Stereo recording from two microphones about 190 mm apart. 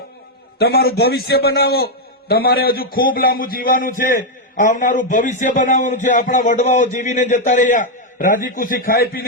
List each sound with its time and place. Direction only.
0.6 s a man's voice: 55° left (ahead or behind)